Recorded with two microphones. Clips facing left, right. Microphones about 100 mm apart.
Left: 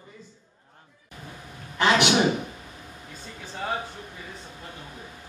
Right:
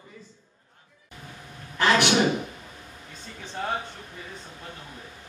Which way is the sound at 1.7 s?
20° left (ahead or behind).